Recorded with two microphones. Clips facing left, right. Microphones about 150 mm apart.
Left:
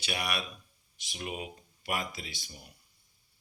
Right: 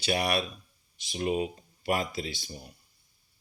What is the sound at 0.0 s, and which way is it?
Speech, 30° right (ahead or behind).